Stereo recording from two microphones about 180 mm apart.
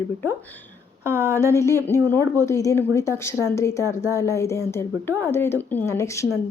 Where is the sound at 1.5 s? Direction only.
15° left (ahead or behind).